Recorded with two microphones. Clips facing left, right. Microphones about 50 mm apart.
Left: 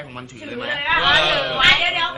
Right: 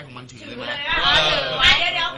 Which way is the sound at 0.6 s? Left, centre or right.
Centre.